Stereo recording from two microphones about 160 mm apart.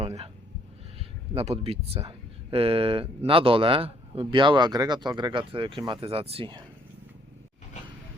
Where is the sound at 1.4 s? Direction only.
40° right (ahead or behind).